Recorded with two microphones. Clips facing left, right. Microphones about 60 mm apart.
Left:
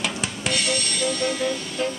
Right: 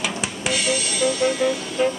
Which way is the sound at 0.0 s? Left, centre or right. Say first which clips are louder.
Right 2 dB; centre.